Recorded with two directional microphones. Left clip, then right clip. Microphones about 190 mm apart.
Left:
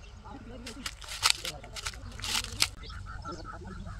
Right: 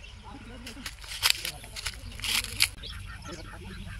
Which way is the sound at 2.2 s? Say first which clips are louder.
Right 3 dB; 5° right (ahead or behind).